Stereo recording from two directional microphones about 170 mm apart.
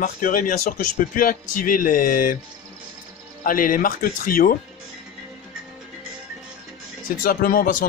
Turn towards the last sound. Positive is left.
turn(degrees=55)  # may be behind; listen again after turning